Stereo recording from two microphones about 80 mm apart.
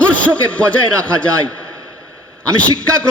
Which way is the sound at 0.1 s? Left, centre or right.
Centre.